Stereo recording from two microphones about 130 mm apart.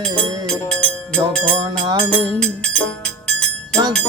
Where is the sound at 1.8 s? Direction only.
35° right (ahead or behind).